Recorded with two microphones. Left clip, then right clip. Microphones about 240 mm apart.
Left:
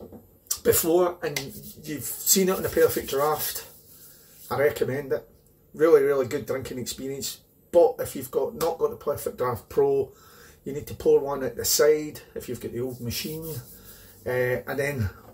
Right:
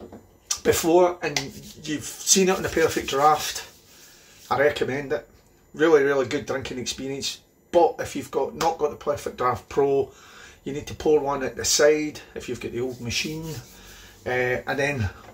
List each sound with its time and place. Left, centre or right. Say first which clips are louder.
0.5 s speech: right 2 dB; centre
4.5 s speech: right 2 dB; centre
10.6 s speech: even; centre
14.2 s speech: right 1 dB; centre